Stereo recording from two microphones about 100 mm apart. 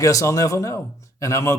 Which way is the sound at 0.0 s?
35° left (ahead or behind).